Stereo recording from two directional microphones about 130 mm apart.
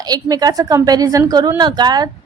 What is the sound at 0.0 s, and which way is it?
A woman's voice, 30° right (ahead or behind).